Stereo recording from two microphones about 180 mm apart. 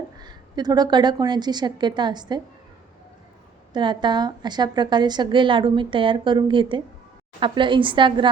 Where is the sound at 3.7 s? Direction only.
25° right (ahead or behind).